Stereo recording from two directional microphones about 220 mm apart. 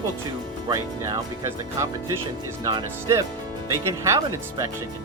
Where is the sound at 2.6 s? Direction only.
15° right (ahead or behind).